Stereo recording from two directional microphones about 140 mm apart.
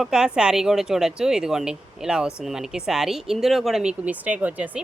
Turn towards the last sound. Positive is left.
turn(degrees=-10)  # may be behind; listen again after turning